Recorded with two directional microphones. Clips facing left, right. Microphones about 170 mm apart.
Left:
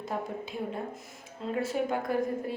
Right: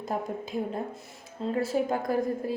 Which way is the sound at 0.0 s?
40° right (ahead or behind).